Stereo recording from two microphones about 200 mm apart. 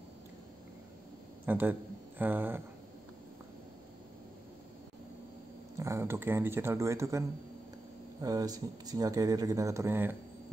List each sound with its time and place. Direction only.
1.4 s a man's voice: 10° right (ahead or behind)
5.8 s speech: 15° right (ahead or behind)